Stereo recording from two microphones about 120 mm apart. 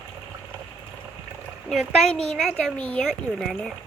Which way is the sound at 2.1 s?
5° left (ahead or behind).